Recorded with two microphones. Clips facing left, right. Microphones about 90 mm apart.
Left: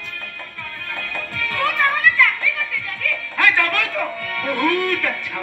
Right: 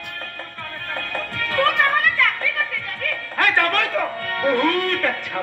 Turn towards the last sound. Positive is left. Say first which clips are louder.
# right 1 dB
turn(degrees=-35)  # may be behind; listen again after turning